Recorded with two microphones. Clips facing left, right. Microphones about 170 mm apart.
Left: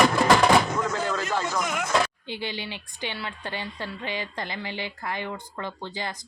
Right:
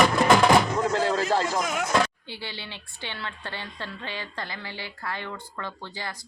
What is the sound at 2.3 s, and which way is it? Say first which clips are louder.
A woman's voice: left 5 dB; 15° left (ahead or behind).